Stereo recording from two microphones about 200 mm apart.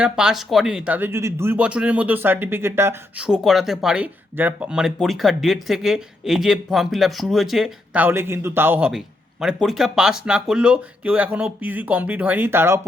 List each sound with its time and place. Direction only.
0.0 s speech: 5° right (ahead or behind)